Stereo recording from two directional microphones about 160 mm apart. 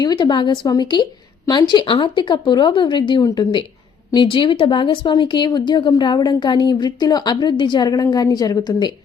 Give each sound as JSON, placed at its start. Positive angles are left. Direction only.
{"t": 0.0, "sound": "speech", "side_deg": 25}